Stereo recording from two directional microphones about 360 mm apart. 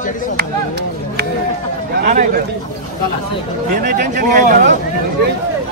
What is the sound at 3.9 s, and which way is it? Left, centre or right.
Speech, right.